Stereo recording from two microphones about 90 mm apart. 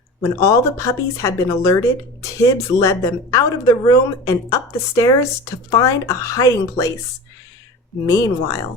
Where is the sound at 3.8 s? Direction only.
40° left (ahead or behind).